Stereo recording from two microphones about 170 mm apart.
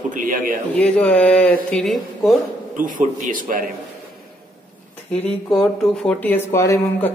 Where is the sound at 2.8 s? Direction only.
55° right (ahead or behind).